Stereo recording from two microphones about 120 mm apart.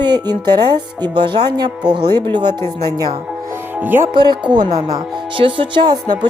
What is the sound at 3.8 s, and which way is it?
Speech, 15° right (ahead or behind).